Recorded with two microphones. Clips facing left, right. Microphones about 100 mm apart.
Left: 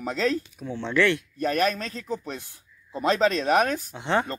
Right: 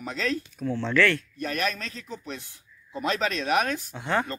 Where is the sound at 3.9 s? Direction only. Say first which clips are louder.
Left 2 dB; 25° left (ahead or behind).